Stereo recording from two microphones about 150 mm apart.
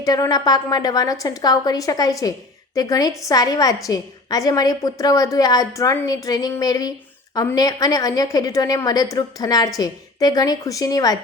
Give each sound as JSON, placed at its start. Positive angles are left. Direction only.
{"t": 0.0, "sound": "a woman's voice", "side_deg": 25}